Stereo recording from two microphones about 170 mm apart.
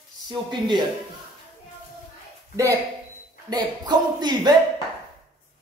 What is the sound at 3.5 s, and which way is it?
A man's voice, 25° right (ahead or behind).